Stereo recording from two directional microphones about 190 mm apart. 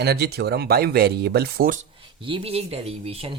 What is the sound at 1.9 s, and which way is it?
Speech, 25° right (ahead or behind).